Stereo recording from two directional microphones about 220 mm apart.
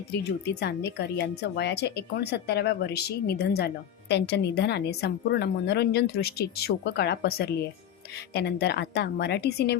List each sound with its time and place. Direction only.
0.3 s speech: 50° left (ahead or behind)